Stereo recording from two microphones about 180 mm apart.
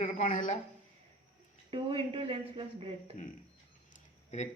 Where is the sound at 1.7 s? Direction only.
30° right (ahead or behind).